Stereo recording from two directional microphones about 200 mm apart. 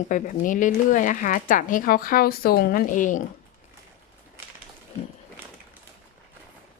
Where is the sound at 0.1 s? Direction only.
40° left (ahead or behind).